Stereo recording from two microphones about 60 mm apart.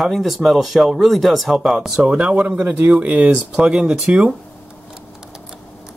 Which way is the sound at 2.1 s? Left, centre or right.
Right.